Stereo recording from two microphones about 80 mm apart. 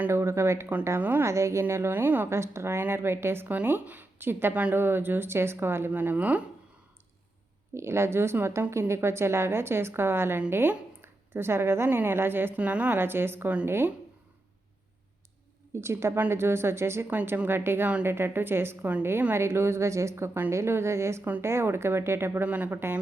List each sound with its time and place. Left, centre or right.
0.1 s a woman's voice: right
0.9 s speech: right
1.2 s a woman's voice: right; by 6.4 s centre
7.8 s a woman's voice: right
15.7 s a woman's voice: right
17.1 s a woman's voice: right
22.4 s speech: centre